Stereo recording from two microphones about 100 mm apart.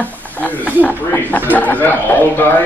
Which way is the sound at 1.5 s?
20° left (ahead or behind).